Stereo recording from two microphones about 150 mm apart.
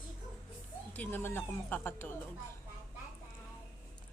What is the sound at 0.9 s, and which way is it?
Speech, 10° left (ahead or behind).